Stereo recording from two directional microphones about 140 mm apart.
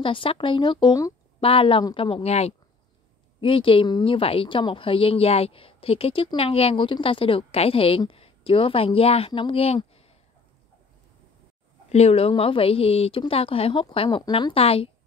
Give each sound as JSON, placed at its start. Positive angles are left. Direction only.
{"t": 0.0, "sound": "a woman's voice", "side_deg": 40}
{"t": 1.4, "sound": "a woman's voice", "side_deg": 40}
{"t": 11.9, "sound": "a woman's voice", "side_deg": 50}